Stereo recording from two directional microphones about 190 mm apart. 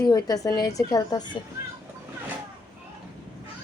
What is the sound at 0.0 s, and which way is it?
A woman's voice, 20° left (ahead or behind).